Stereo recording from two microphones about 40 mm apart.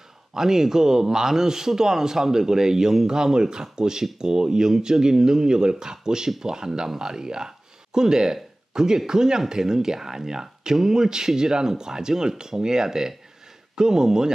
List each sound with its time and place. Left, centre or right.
0.3 s speech: centre